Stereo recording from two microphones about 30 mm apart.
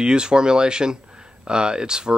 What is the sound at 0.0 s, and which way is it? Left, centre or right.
Speech, right.